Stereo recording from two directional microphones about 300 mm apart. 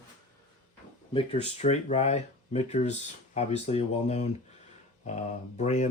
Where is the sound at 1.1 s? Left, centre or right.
Centre.